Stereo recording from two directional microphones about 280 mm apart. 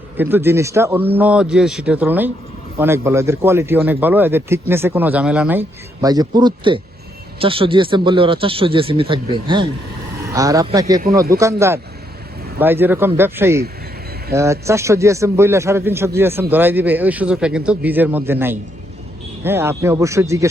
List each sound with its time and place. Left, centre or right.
0.2 s a man's voice: centre